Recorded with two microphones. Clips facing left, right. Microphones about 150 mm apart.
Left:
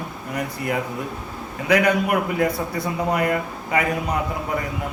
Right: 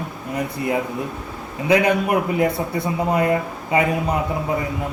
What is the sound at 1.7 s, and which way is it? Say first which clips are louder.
A man's voice: right 1 dB; 25° right (ahead or behind).